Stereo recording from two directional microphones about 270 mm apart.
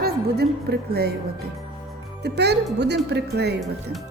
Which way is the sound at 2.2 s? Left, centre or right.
Right.